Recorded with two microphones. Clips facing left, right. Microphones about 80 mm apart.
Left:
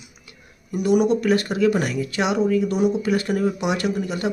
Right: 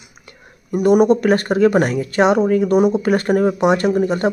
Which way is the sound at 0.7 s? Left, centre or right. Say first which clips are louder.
Right 6 dB; right.